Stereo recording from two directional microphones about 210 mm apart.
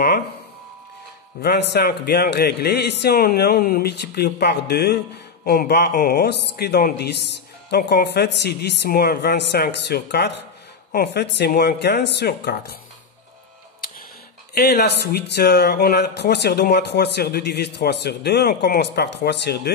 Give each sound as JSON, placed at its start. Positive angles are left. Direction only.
{"t": 1.4, "sound": "a man's voice", "side_deg": 50}
{"t": 13.7, "sound": "music", "side_deg": 45}
{"t": 14.5, "sound": "a man's voice", "side_deg": 50}